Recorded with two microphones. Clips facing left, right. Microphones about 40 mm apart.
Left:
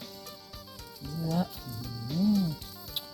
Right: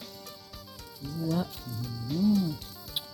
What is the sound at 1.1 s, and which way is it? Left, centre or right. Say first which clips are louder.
Music: right 1 dB; centre.